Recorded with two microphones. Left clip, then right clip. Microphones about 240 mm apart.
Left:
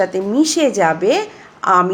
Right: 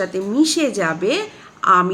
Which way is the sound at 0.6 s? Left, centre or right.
Centre.